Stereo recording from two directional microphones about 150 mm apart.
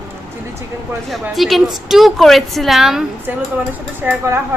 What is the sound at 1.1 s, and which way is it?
A woman's voice, centre (ahead or behind).